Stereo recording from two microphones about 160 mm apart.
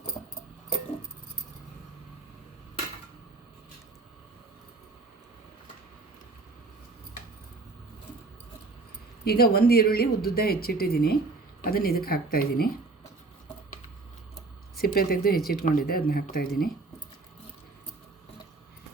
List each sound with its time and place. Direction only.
9.2 s speech: 75° left (ahead or behind)
14.8 s speech: 70° left (ahead or behind)